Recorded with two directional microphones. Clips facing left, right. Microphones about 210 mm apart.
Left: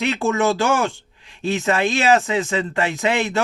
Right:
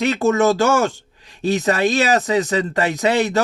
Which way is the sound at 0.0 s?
40° right (ahead or behind).